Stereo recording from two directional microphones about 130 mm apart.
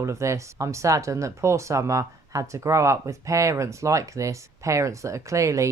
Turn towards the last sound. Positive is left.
turn(degrees=-25)  # may be behind; listen again after turning